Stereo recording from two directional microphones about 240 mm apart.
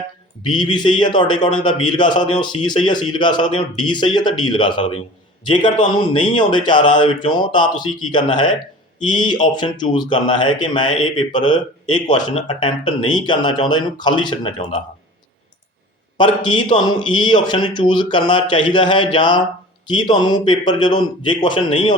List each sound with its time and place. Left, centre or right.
0.4 s speech: centre
16.1 s speech: centre